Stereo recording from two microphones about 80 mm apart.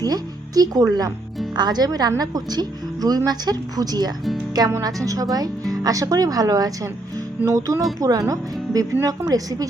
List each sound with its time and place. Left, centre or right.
0.0 s speech: right
1.5 s speech: right